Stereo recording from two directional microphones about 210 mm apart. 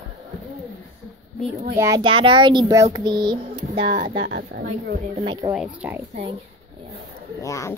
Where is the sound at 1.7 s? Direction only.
15° right (ahead or behind).